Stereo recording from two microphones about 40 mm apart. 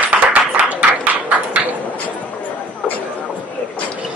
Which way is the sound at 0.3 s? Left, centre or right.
Right.